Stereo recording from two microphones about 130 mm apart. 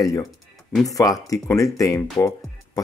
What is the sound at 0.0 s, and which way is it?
Speech, 25° left (ahead or behind).